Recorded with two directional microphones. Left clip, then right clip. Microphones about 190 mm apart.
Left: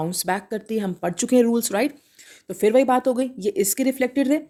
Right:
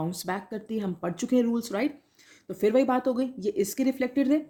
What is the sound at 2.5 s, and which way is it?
Speech, 30° left (ahead or behind).